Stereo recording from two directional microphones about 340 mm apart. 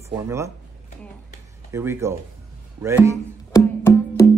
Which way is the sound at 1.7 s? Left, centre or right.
Centre.